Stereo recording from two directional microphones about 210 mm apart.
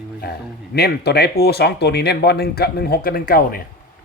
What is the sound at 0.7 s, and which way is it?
Speech, 50° left (ahead or behind).